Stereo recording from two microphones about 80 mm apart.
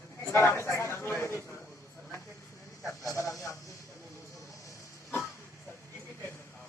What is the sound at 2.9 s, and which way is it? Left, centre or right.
Speech, left.